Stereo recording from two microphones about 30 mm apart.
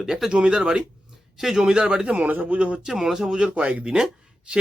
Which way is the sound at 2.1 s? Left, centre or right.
Right.